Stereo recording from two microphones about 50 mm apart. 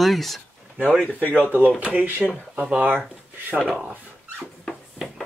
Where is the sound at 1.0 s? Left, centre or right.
Left.